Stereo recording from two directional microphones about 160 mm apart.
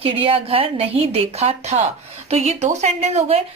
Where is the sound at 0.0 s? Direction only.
35° right (ahead or behind).